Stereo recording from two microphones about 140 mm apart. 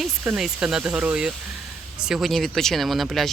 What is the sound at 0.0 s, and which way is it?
Speech, 5° right (ahead or behind).